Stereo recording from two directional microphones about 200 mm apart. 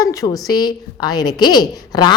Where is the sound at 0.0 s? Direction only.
15° left (ahead or behind).